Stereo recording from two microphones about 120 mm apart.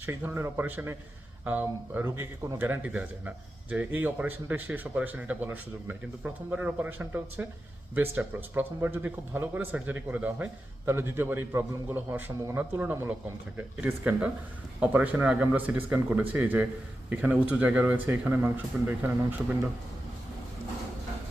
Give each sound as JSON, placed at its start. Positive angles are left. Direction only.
{"t": 0.0, "sound": "speech", "side_deg": -15}
{"t": 2.0, "sound": "a man's voice", "side_deg": -30}
{"t": 2.6, "sound": "speech", "side_deg": -15}